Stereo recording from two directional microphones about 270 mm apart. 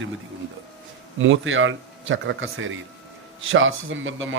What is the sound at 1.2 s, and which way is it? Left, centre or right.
Speech, right.